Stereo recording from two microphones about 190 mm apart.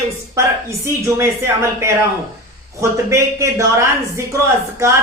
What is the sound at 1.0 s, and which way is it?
Speech, 15° right (ahead or behind).